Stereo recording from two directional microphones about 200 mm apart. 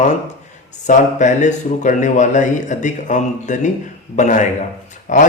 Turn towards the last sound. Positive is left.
turn(degrees=40)  # may be behind; listen again after turning